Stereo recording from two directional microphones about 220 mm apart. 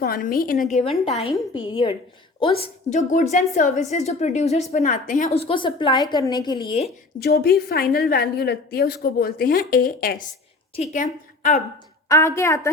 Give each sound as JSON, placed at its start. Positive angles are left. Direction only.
{"t": 0.0, "sound": "a woman's voice", "side_deg": 45}
{"t": 7.2, "sound": "a woman's voice", "side_deg": 45}
{"t": 12.0, "sound": "a woman's voice", "side_deg": 15}